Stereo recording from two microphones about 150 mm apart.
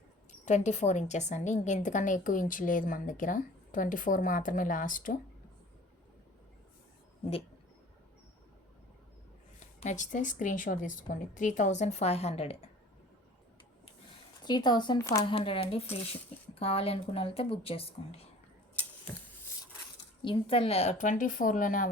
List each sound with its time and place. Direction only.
0.3 s a woman's voice: 50° left (ahead or behind)
9.6 s a woman's voice: 50° left (ahead or behind)
14.4 s speech: 30° left (ahead or behind)
15.3 s speech: 35° left (ahead or behind)
20.2 s a woman's voice: 35° left (ahead or behind); by 21.8 s 65° left (ahead or behind)